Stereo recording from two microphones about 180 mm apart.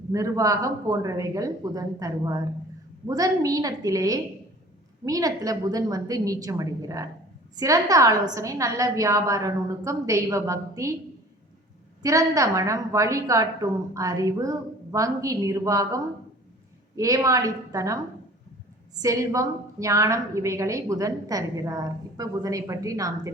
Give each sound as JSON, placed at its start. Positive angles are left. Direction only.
{"t": 0.1, "sound": "a woman's voice", "side_deg": -20}
{"t": 12.0, "sound": "a woman's voice", "side_deg": -20}
{"t": 17.0, "sound": "a woman's voice", "side_deg": -20}